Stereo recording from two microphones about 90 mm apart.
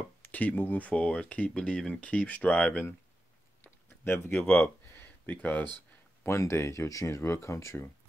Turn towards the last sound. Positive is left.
turn(degrees=30)  # may be behind; listen again after turning